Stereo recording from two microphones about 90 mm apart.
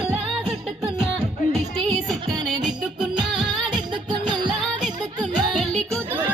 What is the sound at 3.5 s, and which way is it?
Music, 55° right (ahead or behind).